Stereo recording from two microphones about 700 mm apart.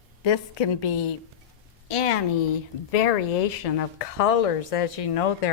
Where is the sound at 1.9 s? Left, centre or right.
Left.